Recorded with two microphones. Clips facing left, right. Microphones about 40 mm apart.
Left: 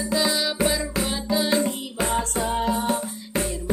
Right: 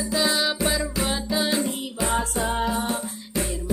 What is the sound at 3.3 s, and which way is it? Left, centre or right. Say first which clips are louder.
Music: left 2 dB; left.